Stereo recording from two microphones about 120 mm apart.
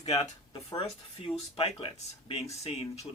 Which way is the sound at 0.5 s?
45° left (ahead or behind).